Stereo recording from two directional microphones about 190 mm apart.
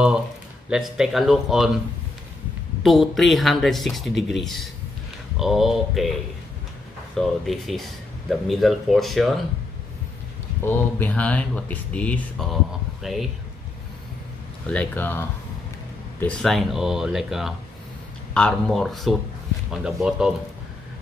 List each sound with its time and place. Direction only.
0.7 s speech: 5° right (ahead or behind)
2.8 s speech: centre (ahead or behind)
7.2 s speech: centre (ahead or behind)
10.6 s speech: 10° left (ahead or behind)
14.7 s speech: 10° left (ahead or behind)